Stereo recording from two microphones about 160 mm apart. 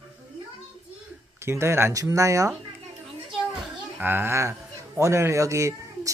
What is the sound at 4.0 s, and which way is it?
Speech, 15° right (ahead or behind).